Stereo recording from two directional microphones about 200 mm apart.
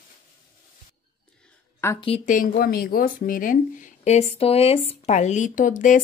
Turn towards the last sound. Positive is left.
turn(degrees=40)  # may be behind; listen again after turning